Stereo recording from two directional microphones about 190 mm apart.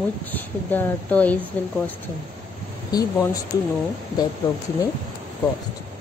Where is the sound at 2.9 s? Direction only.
20° left (ahead or behind).